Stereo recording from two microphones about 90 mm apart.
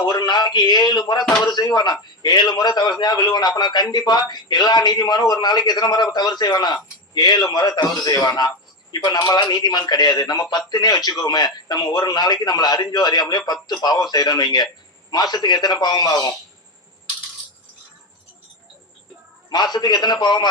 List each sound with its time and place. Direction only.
0.0 s a man's voice: 50° left (ahead or behind)
1.2 s speech: 5° left (ahead or behind)
1.5 s a man's voice: 50° left (ahead or behind)
19.5 s a man's voice: 50° left (ahead or behind)